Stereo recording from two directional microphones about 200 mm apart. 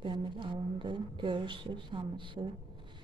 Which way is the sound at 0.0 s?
25° right (ahead or behind).